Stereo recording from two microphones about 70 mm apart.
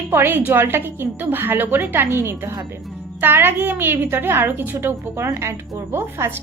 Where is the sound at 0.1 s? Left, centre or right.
Right.